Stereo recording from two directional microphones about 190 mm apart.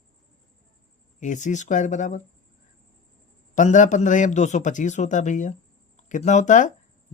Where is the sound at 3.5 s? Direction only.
40° left (ahead or behind).